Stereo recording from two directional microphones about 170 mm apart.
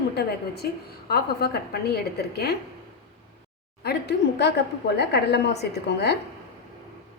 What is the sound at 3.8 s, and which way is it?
A woman's voice, 75° left (ahead or behind).